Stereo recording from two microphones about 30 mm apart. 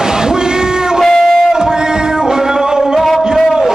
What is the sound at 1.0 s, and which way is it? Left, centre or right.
Guitar, centre.